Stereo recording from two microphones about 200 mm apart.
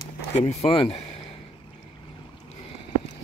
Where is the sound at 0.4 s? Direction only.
35° left (ahead or behind).